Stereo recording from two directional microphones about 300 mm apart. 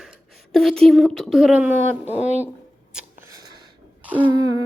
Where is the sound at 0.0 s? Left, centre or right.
Centre.